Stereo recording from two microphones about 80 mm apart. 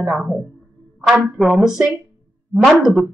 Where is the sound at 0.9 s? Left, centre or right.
Centre.